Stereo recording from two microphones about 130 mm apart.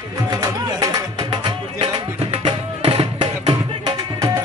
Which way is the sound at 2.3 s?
50° right (ahead or behind).